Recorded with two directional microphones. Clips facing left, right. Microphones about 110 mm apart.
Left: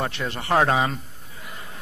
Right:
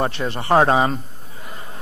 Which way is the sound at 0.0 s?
30° right (ahead or behind).